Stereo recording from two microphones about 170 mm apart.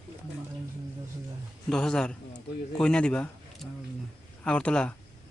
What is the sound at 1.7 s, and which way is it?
A man's voice, 5° left (ahead or behind).